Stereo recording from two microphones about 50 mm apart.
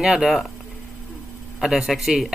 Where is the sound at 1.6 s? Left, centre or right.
Centre.